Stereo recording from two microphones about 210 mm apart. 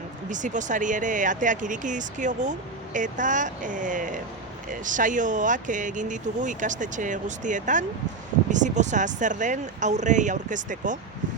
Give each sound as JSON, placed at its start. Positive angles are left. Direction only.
{"t": 0.3, "sound": "speech", "side_deg": -35}